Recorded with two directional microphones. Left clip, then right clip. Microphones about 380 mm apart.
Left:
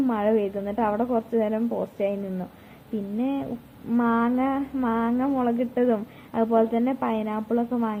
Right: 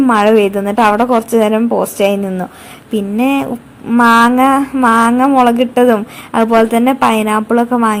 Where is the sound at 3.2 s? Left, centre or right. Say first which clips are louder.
Right 15 dB; centre.